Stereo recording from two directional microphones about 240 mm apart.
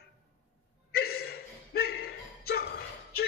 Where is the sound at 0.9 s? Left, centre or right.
Left.